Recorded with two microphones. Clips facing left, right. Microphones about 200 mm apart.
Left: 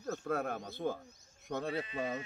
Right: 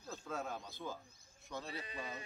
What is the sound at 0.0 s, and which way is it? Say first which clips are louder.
A man's voice: left 8 dB; 65° left (ahead or behind).